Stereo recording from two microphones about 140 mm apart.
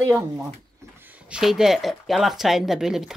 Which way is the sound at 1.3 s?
5° right (ahead or behind).